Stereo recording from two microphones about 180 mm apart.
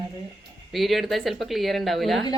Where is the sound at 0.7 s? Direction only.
Centre (ahead or behind).